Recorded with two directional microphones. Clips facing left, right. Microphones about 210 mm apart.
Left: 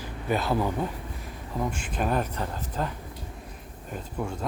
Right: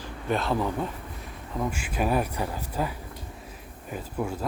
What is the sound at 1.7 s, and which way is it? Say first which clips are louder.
Speech: right 3 dB; 10° right (ahead or behind).